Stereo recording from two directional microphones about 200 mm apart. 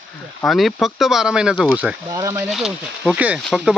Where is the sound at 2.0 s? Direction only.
15° right (ahead or behind).